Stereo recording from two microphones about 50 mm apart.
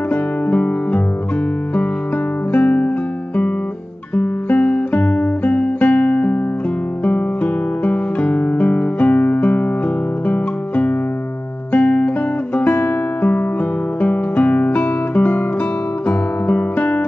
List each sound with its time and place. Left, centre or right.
0.1 s music: left
2.5 s music: left
4.1 s guitar: left
4.6 s music: left
7.8 s guitar: left
10.2 s music: left
14.0 s guitar: left
16.1 s music: left